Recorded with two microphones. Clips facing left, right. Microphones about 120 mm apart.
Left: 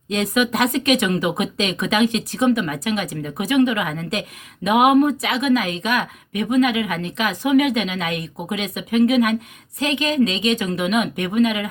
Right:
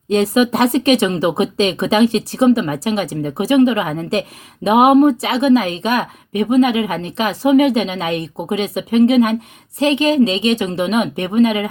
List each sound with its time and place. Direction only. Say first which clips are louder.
0.1 s speech: right 6 dB; 30° right (ahead or behind)